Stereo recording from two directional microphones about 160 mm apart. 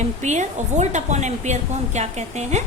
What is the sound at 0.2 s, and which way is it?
A woman's voice, 45° right (ahead or behind).